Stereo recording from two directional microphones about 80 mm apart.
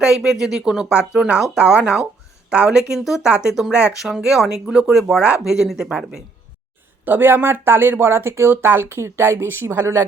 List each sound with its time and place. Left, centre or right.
0.0 s speech: centre
7.0 s speech: right